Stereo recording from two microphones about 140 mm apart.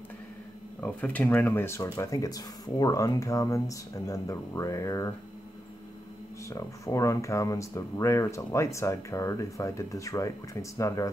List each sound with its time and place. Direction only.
0.7 s speech: 10° left (ahead or behind)
6.5 s speech: 20° left (ahead or behind)